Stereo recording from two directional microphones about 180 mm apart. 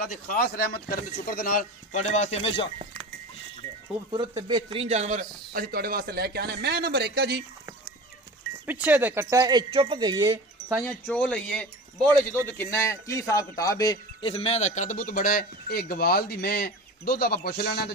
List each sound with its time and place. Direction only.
0.0 s a man's voice: 50° left (ahead or behind); by 2.7 s 30° left (ahead or behind)
4.1 s a man's voice: 20° right (ahead or behind); by 7.4 s 60° right (ahead or behind)
8.6 s speech: 10° right (ahead or behind)
10.8 s a man's voice: 5° left (ahead or behind)
14.3 s a man's voice: 35° left (ahead or behind); by 17.9 s 60° left (ahead or behind)